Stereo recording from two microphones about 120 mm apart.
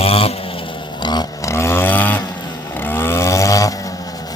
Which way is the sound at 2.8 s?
20° left (ahead or behind).